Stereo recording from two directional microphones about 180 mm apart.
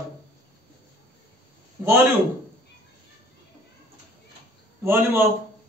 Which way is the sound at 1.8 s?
15° right (ahead or behind).